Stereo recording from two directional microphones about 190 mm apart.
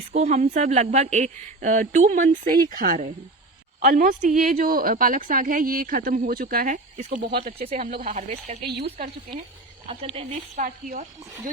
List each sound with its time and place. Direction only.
0.1 s a woman's voice: 35° right (ahead or behind)
7.3 s speech: 55° right (ahead or behind)
7.7 s a woman's voice: 35° right (ahead or behind)
7.9 s a woman's voice: 45° right (ahead or behind)
8.6 s speech: 55° right (ahead or behind)
9.9 s a woman's voice: 30° right (ahead or behind)